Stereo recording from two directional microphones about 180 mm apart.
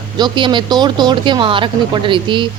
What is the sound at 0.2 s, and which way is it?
Speech, 25° right (ahead or behind).